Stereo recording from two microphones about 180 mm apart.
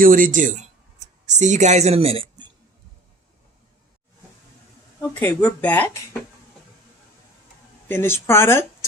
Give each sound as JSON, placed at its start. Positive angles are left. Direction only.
{"t": 0.0, "sound": "speech", "side_deg": -50}
{"t": 4.9, "sound": "speech", "side_deg": 10}
{"t": 7.9, "sound": "speech", "side_deg": 10}